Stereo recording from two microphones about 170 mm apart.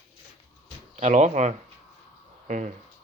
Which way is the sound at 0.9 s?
40° right (ahead or behind).